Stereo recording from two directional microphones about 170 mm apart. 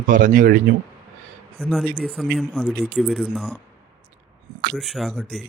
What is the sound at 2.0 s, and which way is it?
Speech, centre (ahead or behind).